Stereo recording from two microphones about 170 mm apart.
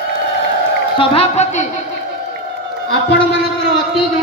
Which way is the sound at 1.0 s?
35° left (ahead or behind).